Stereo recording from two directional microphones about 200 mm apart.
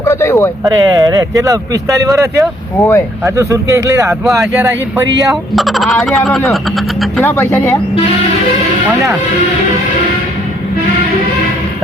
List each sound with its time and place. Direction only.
0.0 s speech: 15° left (ahead or behind)
0.6 s speech: 20° right (ahead or behind)
2.7 s speech: 10° left (ahead or behind)
3.2 s speech: 15° right (ahead or behind)
5.3 s speech: centre (ahead or behind)
7.3 s speech: 10° left (ahead or behind)